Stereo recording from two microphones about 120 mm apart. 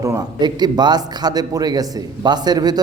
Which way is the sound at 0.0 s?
35° right (ahead or behind).